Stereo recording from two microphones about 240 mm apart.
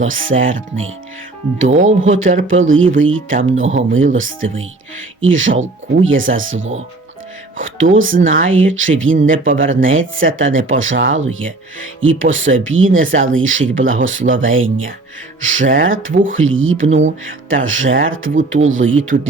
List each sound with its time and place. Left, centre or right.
0.0 s speech: right
15.6 s speech: right
15.9 s speech: right
19.1 s speech: right